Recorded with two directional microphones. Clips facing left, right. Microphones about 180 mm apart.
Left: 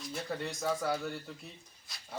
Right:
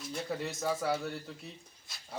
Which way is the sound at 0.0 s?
Centre (ahead or behind).